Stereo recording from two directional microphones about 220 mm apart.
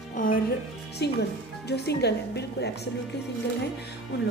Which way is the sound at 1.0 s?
50° left (ahead or behind).